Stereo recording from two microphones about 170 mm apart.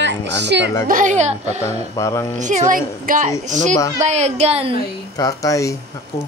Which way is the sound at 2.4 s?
45° right (ahead or behind).